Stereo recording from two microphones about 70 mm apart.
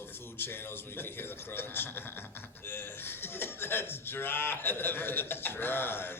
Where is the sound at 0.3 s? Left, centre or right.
Left.